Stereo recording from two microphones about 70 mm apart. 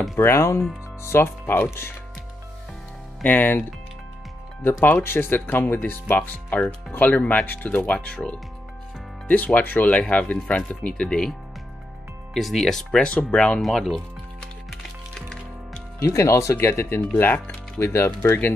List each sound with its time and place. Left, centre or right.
0.1 s speech: left
3.3 s speech: left
4.8 s speech: left; by 11.3 s centre
12.4 s speech: centre
13.6 s speech: centre
14.7 s music: centre
16.0 s speech: left
16.5 s speech: left